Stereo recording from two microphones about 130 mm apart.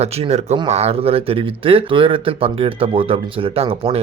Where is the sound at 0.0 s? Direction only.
55° right (ahead or behind).